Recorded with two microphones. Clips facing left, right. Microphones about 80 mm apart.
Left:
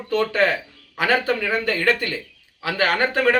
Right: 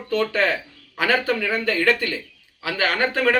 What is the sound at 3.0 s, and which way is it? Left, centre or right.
Speech, centre.